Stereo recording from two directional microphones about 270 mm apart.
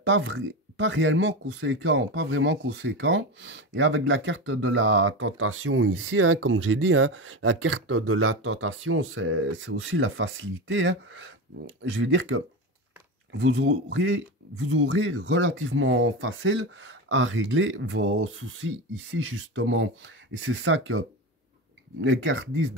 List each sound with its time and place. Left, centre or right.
0.0 s speech: right
22.0 s speech: right